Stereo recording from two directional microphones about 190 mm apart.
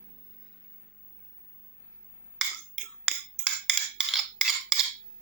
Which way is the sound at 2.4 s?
5° right (ahead or behind).